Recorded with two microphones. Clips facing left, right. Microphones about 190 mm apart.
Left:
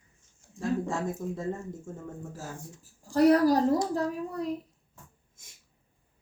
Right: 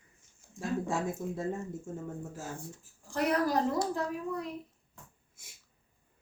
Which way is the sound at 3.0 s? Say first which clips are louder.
Left 9 dB; 40° left (ahead or behind).